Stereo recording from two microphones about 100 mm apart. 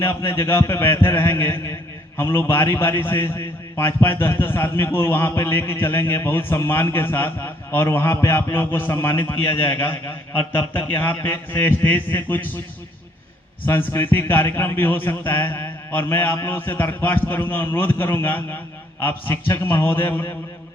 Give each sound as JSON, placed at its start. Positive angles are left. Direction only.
{"t": 0.0, "sound": "a man's voice", "side_deg": 25}
{"t": 13.7, "sound": "a man's voice", "side_deg": 20}